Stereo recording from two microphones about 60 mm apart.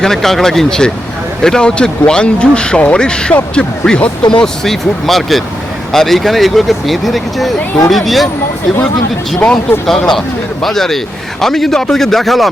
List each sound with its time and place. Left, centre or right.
0.0 s speech: centre
4.6 s a man's voice: centre
9.5 s a man's voice: centre